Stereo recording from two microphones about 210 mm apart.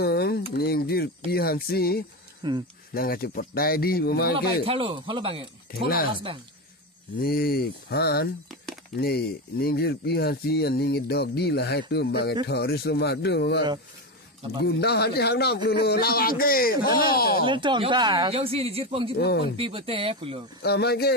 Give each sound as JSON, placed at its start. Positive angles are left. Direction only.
{"t": 0.0, "sound": "a sound", "side_deg": 50}
{"t": 0.6, "sound": "speech", "side_deg": 45}
{"t": 2.4, "sound": "speech", "side_deg": -20}
{"t": 2.9, "sound": "speech", "side_deg": 45}
{"t": 4.6, "sound": "speech", "side_deg": -25}
{"t": 5.7, "sound": "speech", "side_deg": 45}
{"t": 7.2, "sound": "speech", "side_deg": 45}
{"t": 14.6, "sound": "speech", "side_deg": 50}
{"t": 17.5, "sound": "speech", "side_deg": -20}
{"t": 19.1, "sound": "speech", "side_deg": 50}
{"t": 19.5, "sound": "speech", "side_deg": -25}
{"t": 20.6, "sound": "speech", "side_deg": 50}